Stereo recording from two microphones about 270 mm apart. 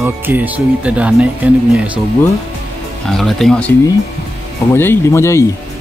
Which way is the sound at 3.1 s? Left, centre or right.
Centre.